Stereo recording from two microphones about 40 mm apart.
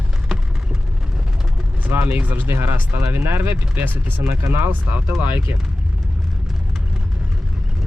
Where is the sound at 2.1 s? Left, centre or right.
Right.